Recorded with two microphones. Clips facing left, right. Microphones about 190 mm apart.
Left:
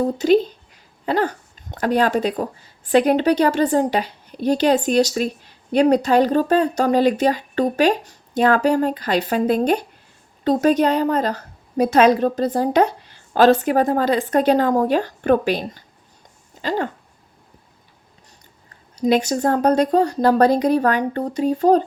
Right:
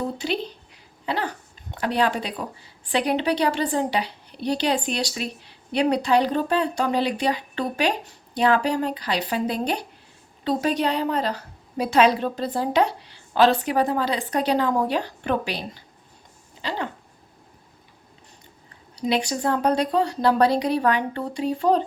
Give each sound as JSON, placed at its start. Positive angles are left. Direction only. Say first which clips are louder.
{"t": 0.2, "sound": "a woman's voice", "louder": "left 12 dB", "side_deg": 45}
{"t": 18.9, "sound": "a woman's voice", "louder": "left 6 dB", "side_deg": 45}